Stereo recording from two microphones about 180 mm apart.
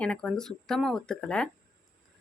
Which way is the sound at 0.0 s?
5° left (ahead or behind).